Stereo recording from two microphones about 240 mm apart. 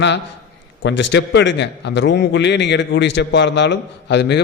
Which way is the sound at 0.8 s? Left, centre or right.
Left.